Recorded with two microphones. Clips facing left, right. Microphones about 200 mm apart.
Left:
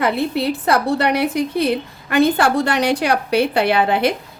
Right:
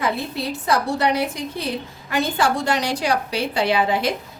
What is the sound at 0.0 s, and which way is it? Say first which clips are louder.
A woman's voice: left 6 dB; 65° left (ahead or behind).